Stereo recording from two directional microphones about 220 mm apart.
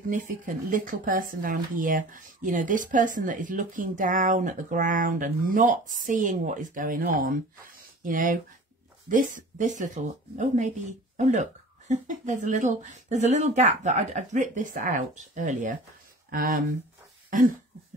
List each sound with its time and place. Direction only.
0.7 s speech: 40° right (ahead or behind)